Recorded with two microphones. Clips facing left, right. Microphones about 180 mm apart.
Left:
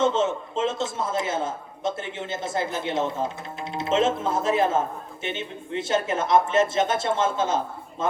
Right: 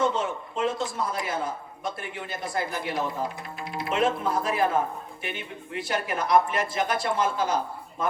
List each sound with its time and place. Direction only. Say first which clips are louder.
0.0 s a man's voice: left 4 dB; 25° left (ahead or behind)